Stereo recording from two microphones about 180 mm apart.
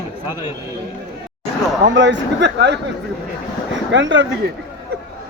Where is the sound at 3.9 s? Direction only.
90° right.